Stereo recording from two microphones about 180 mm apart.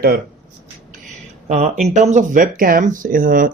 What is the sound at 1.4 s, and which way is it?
Speech, 40° right (ahead or behind).